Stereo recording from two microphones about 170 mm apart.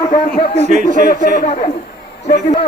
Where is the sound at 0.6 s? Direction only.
45° right (ahead or behind).